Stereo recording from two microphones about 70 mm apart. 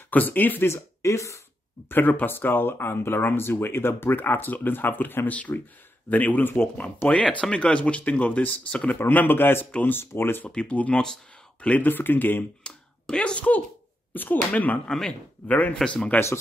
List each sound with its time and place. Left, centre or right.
0.1 s speech: left
0.7 s speech: left
1.9 s speech: left
7.1 s speech: centre; by 10.5 s left
10.5 s speech: centre
11.6 s speech: left
12.6 s finger snapping: centre
14.1 s speech: left
14.9 s speech: centre